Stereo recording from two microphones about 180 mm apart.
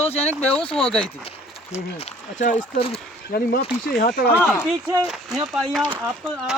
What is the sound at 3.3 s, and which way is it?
Speech, 60° left (ahead or behind).